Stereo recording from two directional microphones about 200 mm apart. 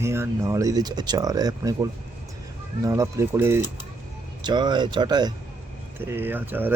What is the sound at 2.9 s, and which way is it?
Speech, 15° right (ahead or behind).